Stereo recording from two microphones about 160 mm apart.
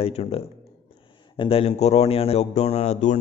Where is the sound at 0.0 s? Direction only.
40° left (ahead or behind).